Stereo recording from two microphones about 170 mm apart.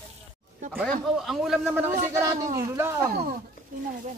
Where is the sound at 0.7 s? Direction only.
Centre (ahead or behind).